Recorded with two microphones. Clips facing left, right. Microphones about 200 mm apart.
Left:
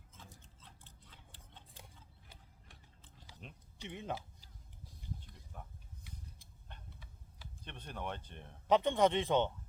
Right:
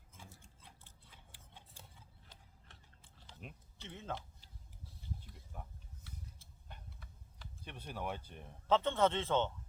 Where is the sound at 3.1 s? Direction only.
15° left (ahead or behind).